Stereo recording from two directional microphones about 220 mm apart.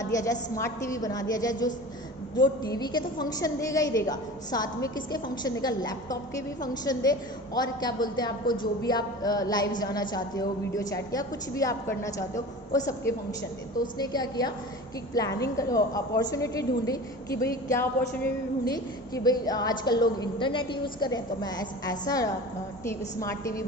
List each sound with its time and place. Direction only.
0.0 s a woman's voice: 15° left (ahead or behind)